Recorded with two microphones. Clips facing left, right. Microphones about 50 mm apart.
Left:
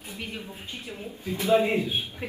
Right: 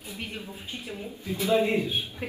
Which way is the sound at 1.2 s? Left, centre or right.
Left.